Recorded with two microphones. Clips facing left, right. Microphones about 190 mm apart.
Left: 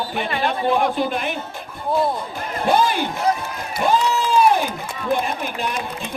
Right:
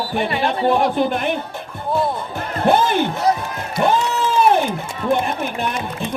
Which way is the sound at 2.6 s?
60° right (ahead or behind).